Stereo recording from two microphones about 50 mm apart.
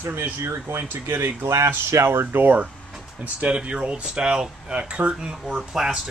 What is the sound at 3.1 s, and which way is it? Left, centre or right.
Speech, right.